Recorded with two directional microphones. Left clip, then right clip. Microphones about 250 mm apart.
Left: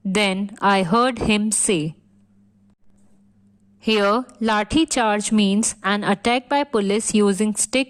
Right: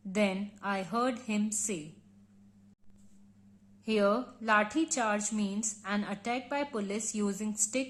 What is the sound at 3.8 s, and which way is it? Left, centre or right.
A woman's voice, left.